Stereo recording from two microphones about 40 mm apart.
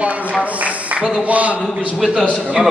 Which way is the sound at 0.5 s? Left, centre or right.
Right.